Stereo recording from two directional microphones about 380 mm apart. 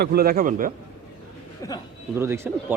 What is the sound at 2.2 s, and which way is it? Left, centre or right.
Speech, centre.